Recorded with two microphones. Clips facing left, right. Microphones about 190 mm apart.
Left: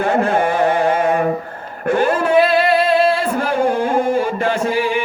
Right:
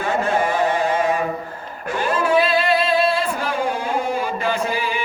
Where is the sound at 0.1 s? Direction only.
55° left (ahead or behind).